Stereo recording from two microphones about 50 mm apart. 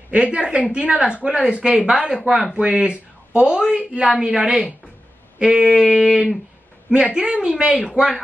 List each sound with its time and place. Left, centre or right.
0.1 s speech: right
7.2 s speech: centre